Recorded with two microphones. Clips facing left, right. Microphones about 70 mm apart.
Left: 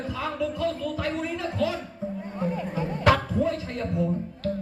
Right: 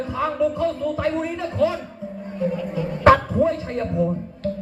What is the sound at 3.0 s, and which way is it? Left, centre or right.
Speech, right.